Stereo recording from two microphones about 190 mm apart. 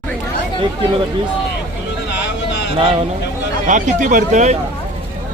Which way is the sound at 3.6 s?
40° right (ahead or behind).